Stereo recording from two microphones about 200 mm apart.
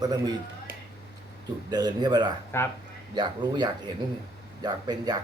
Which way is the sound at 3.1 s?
20° right (ahead or behind).